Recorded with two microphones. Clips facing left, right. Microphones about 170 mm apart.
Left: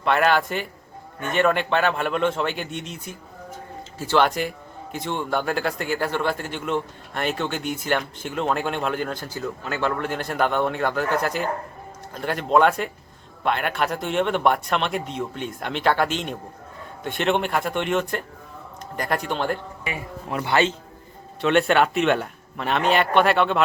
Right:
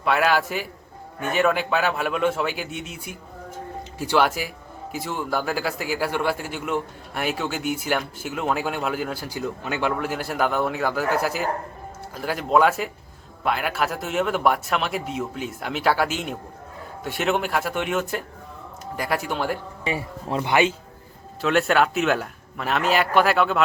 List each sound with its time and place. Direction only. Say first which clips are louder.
0.0 s a man's voice: left 1 dB; 5° right (ahead or behind)
19.8 s a man's voice: right 4 dB; 30° right (ahead or behind)
20.4 s a man's voice: right 1 dB; 15° right (ahead or behind)
21.4 s speech: left 1 dB; centre (ahead or behind)